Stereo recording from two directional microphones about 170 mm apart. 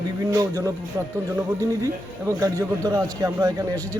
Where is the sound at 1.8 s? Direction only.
20° right (ahead or behind).